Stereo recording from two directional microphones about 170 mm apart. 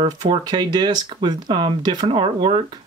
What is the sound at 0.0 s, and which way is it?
Speech, 25° right (ahead or behind).